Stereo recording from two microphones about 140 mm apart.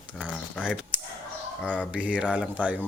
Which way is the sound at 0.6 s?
10° right (ahead or behind).